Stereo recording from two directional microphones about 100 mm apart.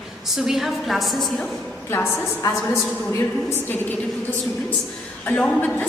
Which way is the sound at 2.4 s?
40° left (ahead or behind).